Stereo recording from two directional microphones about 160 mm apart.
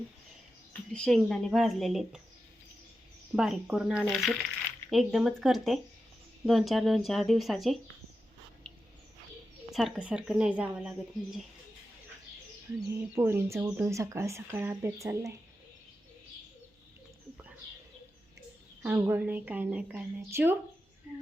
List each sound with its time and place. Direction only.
0.7 s a woman's voice: 5° left (ahead or behind)
3.3 s a woman's voice: centre (ahead or behind)
8.7 s a sound: 5° left (ahead or behind)
9.7 s a woman's voice: 5° right (ahead or behind)
12.9 s speech: 15° right (ahead or behind)
18.8 s speech: 10° right (ahead or behind)